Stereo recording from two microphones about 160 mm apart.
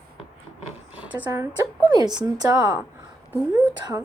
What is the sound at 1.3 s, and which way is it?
A woman's voice, 25° right (ahead or behind).